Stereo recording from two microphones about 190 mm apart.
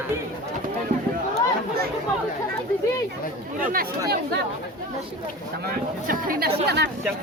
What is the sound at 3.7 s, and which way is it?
Speech, 50° right (ahead or behind).